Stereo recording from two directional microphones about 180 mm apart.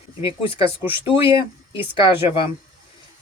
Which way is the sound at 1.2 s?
30° left (ahead or behind).